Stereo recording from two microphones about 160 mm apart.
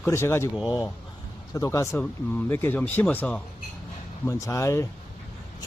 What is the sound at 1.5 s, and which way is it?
Speech, 20° left (ahead or behind).